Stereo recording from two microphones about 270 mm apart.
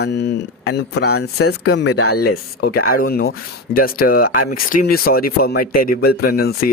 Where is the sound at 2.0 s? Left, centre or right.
Left.